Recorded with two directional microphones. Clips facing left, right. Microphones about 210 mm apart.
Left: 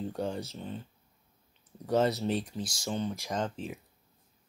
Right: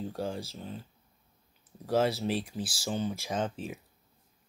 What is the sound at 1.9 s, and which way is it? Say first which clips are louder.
Speech: even; 5° right (ahead or behind).